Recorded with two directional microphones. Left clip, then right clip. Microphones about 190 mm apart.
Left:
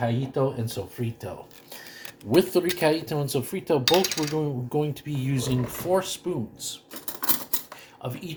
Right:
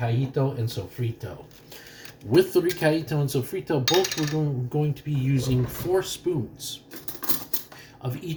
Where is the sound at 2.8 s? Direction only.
35° left (ahead or behind).